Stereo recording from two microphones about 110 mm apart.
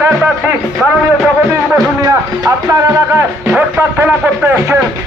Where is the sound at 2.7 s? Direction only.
25° right (ahead or behind).